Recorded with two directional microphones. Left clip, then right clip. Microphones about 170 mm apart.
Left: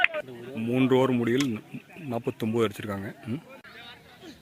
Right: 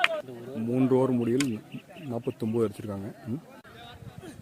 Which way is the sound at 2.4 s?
5° left (ahead or behind).